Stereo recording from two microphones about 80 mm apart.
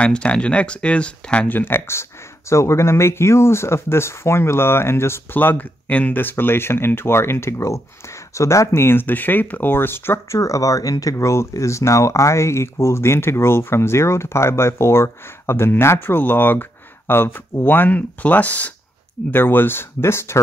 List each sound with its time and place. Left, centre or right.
0.0 s speech: centre
1.6 s speech: left